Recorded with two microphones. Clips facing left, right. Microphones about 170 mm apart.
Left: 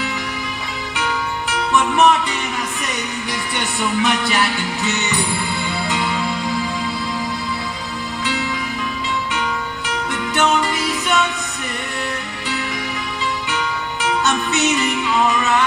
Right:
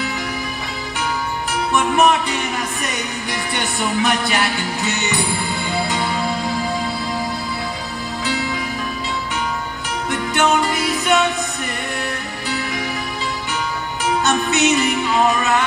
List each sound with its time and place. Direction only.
0.9 s music: 45° right (ahead or behind)
3.5 s music: 45° right (ahead or behind)
10.1 s music: 45° right (ahead or behind)
13.5 s music: 45° right (ahead or behind)